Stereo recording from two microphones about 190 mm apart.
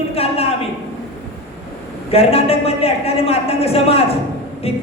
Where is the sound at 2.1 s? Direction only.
30° left (ahead or behind).